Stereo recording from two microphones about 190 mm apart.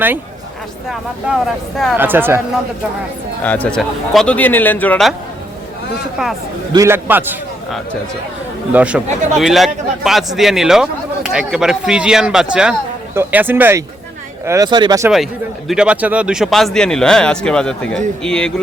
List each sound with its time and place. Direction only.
0.9 s a man's voice: centre (ahead or behind)
2.0 s speech: 10° right (ahead or behind)
3.4 s a man's voice: 5° left (ahead or behind)
6.7 s speech: 10° right (ahead or behind)
8.7 s a man's voice: 5° right (ahead or behind)
15.1 s a man's voice: centre (ahead or behind)